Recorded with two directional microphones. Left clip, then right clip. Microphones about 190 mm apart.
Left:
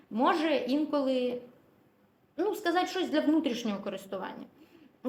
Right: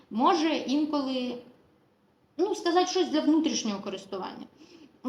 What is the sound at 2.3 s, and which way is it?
A woman's voice, 35° left (ahead or behind).